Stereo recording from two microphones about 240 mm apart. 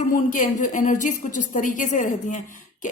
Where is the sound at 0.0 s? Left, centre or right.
Left.